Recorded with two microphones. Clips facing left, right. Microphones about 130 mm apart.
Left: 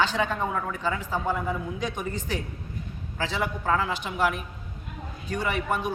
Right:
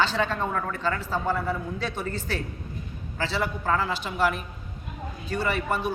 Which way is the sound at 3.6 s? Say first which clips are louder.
Even; 5° left (ahead or behind).